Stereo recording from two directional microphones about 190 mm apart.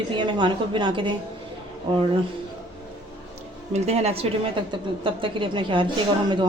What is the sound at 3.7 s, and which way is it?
A woman's voice, 35° right (ahead or behind).